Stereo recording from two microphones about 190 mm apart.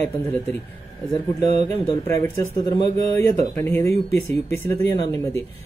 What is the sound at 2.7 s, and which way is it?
Speech, 20° left (ahead or behind).